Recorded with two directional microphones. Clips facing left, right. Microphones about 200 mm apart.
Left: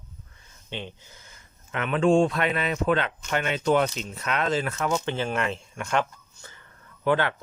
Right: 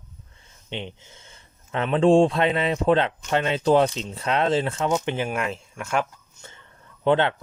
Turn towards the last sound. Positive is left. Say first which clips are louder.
# right 4 dB
turn(degrees=-25)  # may be behind; listen again after turning